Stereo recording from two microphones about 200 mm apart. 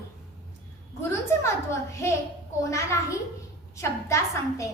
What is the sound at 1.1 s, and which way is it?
A woman's voice, 15° left (ahead or behind).